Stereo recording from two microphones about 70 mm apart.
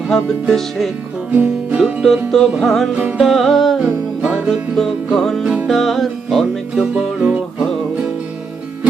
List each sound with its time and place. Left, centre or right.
0.1 s music: centre
1.3 s music: right
2.0 s music: centre
2.9 s music: right
3.2 s music: centre
3.8 s music: centre
4.8 s music: centre
5.4 s music: centre
5.6 s music: centre